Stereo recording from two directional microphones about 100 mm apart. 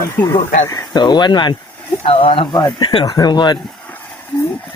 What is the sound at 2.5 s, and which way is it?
Speech, 35° left (ahead or behind).